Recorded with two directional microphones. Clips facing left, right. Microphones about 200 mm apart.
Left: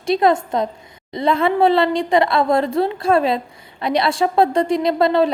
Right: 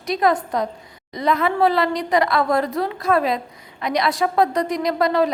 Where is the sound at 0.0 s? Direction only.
25° left (ahead or behind).